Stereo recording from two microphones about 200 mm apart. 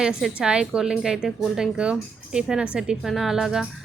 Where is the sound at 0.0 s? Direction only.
Centre (ahead or behind).